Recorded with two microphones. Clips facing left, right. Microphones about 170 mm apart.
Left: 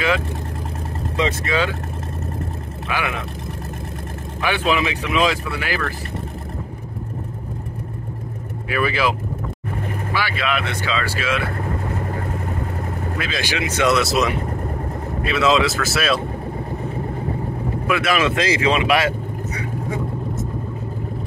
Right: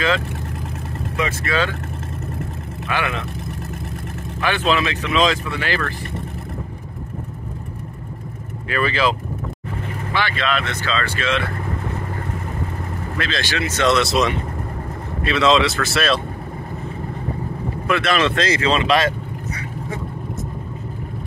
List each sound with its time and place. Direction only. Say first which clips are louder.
1.1 s speech: left 1 dB; 20° left (ahead or behind)
2.9 s speech: right 1 dB; 10° left (ahead or behind)
4.4 s speech: even; 10° left (ahead or behind)
8.6 s speech: right 1 dB; 10° left (ahead or behind)
10.1 s speech: right 2 dB; 10° left (ahead or behind)
13.2 s speech: right 2 dB; 10° left (ahead or behind)
17.8 s speech: right 1 dB; 5° left (ahead or behind)